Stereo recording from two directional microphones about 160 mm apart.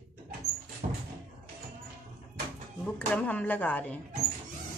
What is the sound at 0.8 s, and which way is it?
Door, 45° right (ahead or behind).